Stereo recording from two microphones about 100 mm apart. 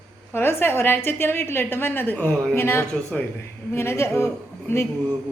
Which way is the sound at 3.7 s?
25° left (ahead or behind).